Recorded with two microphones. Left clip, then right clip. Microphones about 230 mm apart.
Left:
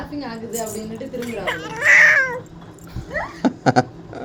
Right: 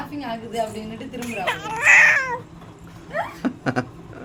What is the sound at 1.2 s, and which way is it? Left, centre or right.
Speech, centre.